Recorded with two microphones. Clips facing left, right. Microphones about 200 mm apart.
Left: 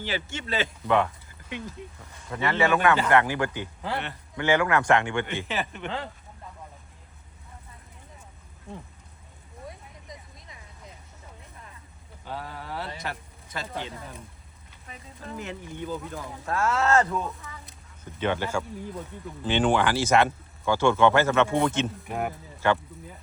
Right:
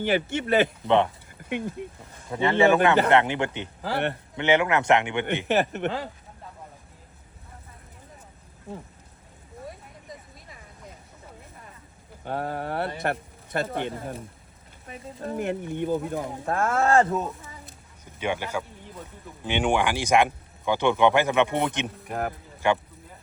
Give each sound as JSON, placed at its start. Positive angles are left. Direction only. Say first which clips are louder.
{"t": 0.0, "sound": "speech", "louder": "right 8 dB", "side_deg": -55}
{"t": 0.9, "sound": "speech", "louder": "even", "side_deg": -25}
{"t": 1.5, "sound": "speech", "louder": "right 7 dB", "side_deg": -55}
{"t": 2.3, "sound": "speech", "louder": "right 4 dB", "side_deg": -25}
{"t": 3.9, "sound": "speech", "louder": "right 7 dB", "side_deg": -60}
{"t": 4.4, "sound": "speech", "louder": "right 1 dB", "side_deg": -20}
{"t": 12.2, "sound": "speech", "louder": "right 8 dB", "side_deg": -55}
{"t": 18.2, "sound": "speech", "louder": "left 1 dB", "side_deg": -10}
{"t": 22.0, "sound": "speech", "louder": "right 1 dB", "side_deg": 0}
{"t": 22.6, "sound": "speech", "louder": "right 1 dB", "side_deg": -15}